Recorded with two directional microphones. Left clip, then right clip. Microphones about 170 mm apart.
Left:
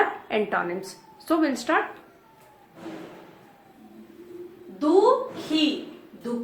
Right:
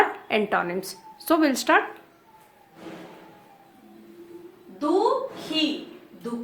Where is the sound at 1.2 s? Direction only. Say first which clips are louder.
Right 2 dB; 60° right (ahead or behind).